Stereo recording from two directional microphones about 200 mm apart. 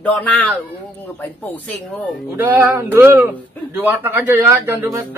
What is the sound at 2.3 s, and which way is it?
Speech, 10° right (ahead or behind).